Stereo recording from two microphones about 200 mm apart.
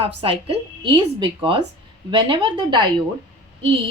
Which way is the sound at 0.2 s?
25° right (ahead or behind).